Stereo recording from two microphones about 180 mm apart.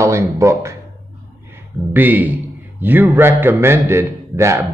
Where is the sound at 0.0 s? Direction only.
15° right (ahead or behind).